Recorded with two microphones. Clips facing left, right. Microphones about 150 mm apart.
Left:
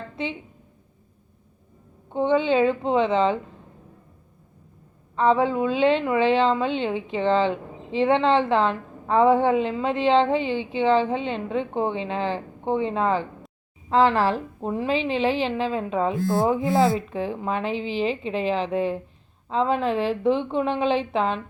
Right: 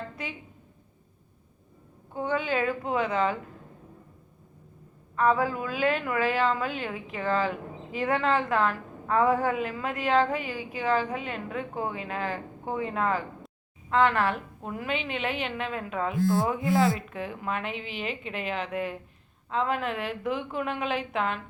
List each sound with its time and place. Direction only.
0.2 s a woman's voice: 25° left (ahead or behind)
2.1 s a woman's voice: 25° left (ahead or behind)
5.1 s a woman's voice: 25° left (ahead or behind)